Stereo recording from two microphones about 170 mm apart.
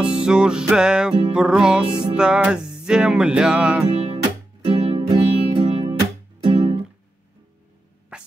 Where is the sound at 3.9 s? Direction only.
35° right (ahead or behind).